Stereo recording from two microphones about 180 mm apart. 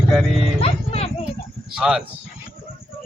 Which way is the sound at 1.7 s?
5° right (ahead or behind).